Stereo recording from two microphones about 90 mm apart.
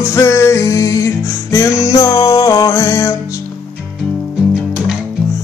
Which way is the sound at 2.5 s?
45° left (ahead or behind).